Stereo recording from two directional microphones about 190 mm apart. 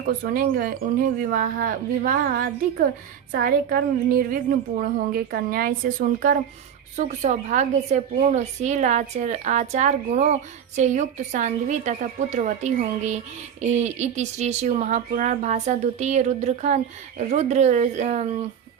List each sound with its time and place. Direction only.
0.2 s a woman's voice: 50° right (ahead or behind)